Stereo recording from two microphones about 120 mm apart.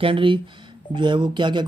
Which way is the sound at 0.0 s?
45° right (ahead or behind).